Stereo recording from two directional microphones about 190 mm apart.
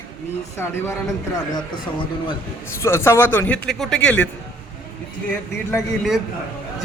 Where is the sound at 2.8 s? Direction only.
15° left (ahead or behind).